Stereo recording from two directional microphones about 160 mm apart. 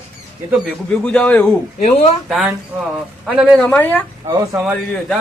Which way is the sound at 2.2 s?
Centre (ahead or behind).